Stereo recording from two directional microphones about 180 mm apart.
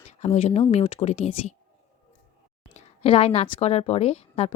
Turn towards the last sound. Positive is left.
turn(degrees=35)  # may be behind; listen again after turning